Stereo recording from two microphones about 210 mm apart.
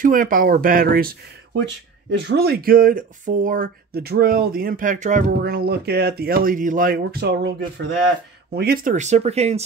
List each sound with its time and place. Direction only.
0.0 s speech: 40° right (ahead or behind)